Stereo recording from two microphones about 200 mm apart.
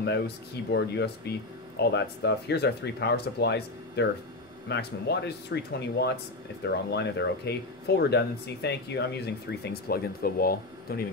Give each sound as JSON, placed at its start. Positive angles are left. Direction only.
{"t": 0.7, "sound": "speech", "side_deg": 55}